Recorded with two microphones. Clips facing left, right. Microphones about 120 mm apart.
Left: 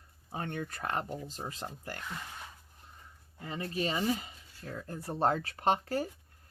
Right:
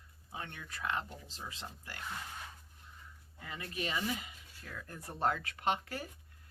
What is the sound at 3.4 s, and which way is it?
Speech, 35° left (ahead or behind).